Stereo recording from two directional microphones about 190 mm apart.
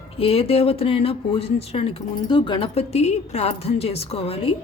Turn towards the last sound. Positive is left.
turn(degrees=30)  # may be behind; listen again after turning